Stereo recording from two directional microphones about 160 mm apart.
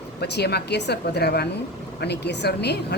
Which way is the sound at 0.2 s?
90° left.